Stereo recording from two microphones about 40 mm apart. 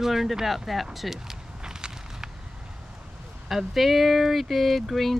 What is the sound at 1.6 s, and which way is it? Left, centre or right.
Walk, centre.